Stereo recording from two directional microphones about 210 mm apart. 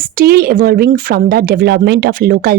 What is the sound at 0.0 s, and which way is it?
A woman's voice, 45° right (ahead or behind).